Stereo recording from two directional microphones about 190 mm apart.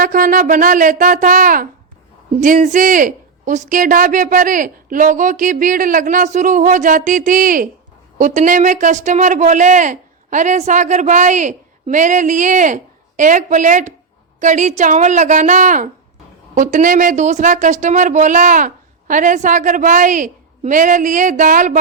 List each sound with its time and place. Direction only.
0.0 s a woman's voice: 45° right (ahead or behind)